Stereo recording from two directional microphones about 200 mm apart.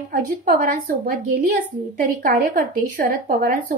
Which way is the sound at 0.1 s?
40° right (ahead or behind).